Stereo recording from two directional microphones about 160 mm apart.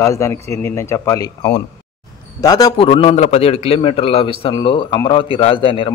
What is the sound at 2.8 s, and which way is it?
A man's voice, 35° left (ahead or behind).